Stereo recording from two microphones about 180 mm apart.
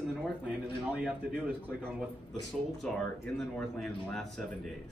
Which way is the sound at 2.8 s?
5° left (ahead or behind).